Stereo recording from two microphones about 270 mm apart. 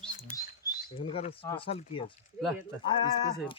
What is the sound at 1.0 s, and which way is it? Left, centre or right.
Speech, left.